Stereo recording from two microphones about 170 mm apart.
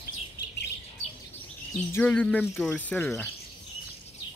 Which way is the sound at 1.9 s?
5° left (ahead or behind).